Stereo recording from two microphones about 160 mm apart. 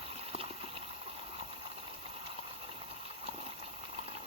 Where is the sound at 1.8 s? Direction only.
40° right (ahead or behind).